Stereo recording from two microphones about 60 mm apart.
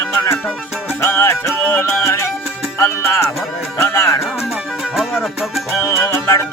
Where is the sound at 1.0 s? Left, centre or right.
Left.